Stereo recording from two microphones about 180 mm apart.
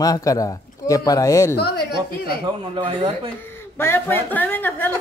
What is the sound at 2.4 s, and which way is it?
Speech, 30° right (ahead or behind).